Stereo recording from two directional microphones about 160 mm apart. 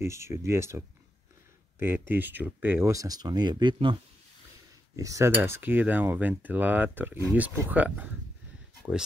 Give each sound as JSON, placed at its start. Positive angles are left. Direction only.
{"t": 0.0, "sound": "speech", "side_deg": -15}